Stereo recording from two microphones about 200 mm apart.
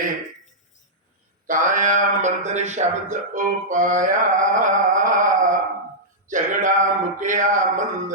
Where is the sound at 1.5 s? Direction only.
40° right (ahead or behind).